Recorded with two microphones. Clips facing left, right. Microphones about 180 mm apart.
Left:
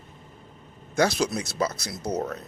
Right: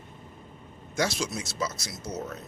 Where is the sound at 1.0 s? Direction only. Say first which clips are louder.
Left 6 dB; 60° left (ahead or behind).